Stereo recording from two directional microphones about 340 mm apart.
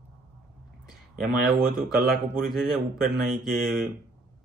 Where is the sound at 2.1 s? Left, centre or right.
Right.